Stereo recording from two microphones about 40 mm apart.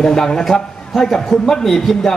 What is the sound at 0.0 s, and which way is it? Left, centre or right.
A man's voice, centre.